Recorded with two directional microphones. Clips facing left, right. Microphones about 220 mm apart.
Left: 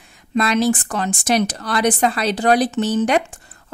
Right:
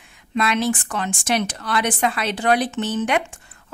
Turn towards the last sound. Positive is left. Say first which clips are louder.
# left 4 dB
turn(degrees=35)  # may be behind; listen again after turning